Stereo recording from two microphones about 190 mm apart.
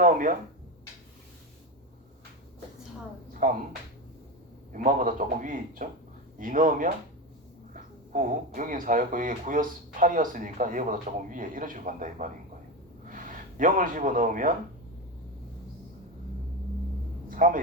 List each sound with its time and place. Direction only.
0.0 s speech: 45° right (ahead or behind)
3.4 s speech: 45° right (ahead or behind)
4.7 s speech: 45° right (ahead or behind)
17.2 s a sound: 45° right (ahead or behind)